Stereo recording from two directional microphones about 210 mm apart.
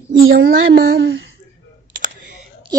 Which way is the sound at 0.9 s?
65° right (ahead or behind).